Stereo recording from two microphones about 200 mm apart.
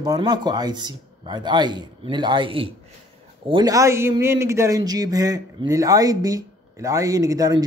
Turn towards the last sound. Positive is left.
turn(degrees=-15)  # may be behind; listen again after turning